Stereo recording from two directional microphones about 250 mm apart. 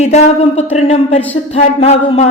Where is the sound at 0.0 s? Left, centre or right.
Left.